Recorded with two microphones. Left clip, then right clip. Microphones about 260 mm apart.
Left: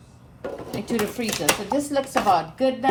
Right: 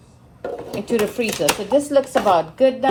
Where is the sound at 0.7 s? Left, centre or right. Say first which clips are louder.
Right 6 dB; centre.